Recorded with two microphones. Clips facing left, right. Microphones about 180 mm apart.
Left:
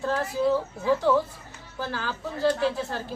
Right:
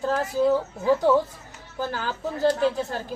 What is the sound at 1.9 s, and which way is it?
A woman's voice, 45° right (ahead or behind).